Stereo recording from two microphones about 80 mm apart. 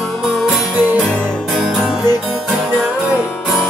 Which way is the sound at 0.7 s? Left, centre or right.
Right.